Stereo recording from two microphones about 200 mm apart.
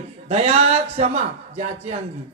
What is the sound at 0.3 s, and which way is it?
Speech, 30° right (ahead or behind).